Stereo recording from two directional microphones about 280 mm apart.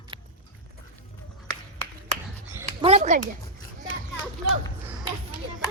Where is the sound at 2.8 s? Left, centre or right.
Right.